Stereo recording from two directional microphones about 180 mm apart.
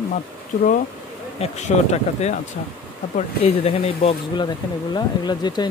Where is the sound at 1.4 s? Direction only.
40° left (ahead or behind).